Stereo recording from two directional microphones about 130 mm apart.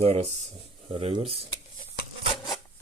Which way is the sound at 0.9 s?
45° right (ahead or behind).